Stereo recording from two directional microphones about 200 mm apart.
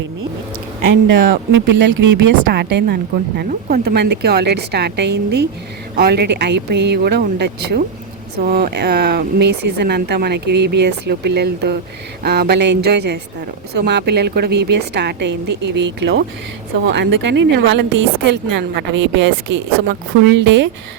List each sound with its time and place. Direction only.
1.3 s speech: 60° right (ahead or behind)
2.4 s speech: 55° right (ahead or behind)